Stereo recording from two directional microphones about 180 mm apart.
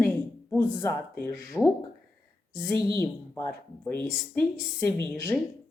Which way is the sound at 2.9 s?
15° left (ahead or behind).